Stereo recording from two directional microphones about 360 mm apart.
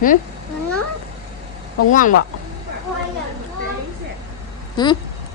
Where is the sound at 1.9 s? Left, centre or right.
Left.